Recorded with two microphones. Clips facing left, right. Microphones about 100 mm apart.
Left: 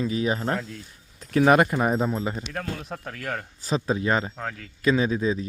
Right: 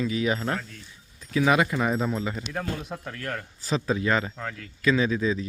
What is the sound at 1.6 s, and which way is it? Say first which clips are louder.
Speech: left 2 dB; 30° left (ahead or behind).